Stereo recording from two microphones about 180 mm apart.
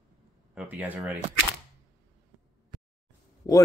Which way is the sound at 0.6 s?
10° right (ahead or behind).